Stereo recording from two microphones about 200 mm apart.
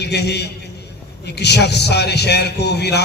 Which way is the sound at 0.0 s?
55° left (ahead or behind).